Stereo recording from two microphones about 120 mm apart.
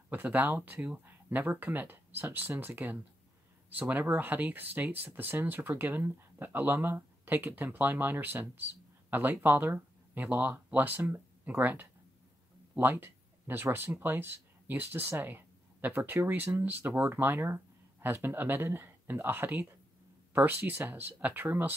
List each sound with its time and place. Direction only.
0.1 s speech: 15° right (ahead or behind)